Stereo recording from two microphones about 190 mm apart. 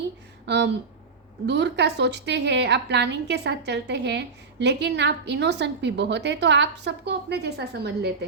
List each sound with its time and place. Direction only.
0.4 s a woman's voice: 65° right (ahead or behind)